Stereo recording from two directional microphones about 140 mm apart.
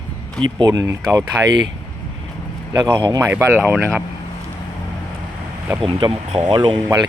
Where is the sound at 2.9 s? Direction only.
35° right (ahead or behind).